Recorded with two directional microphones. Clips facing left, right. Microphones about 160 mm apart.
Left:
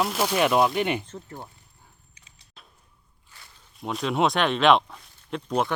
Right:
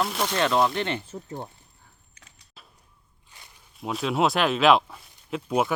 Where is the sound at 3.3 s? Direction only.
20° right (ahead or behind).